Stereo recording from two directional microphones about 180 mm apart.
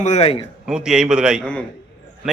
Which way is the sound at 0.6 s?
5° right (ahead or behind).